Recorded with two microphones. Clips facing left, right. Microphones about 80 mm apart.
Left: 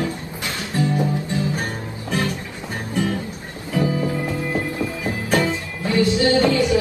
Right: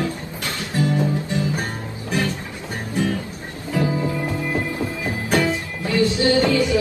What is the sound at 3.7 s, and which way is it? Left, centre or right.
Music, right.